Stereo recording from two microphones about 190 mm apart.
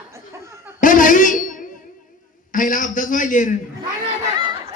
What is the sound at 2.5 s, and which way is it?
A man's voice, 45° left (ahead or behind).